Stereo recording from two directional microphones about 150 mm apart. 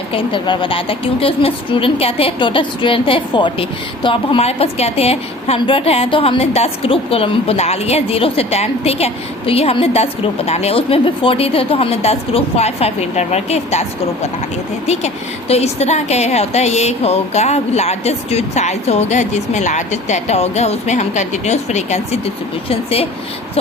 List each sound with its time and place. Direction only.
0.1 s a woman's voice: 35° left (ahead or behind)
14.8 s a woman's voice: 45° left (ahead or behind)